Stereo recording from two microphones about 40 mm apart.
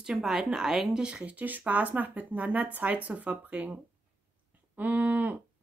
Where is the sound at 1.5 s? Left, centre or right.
Right.